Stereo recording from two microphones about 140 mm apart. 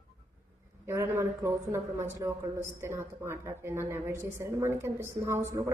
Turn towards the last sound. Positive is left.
turn(degrees=-20)  # may be behind; listen again after turning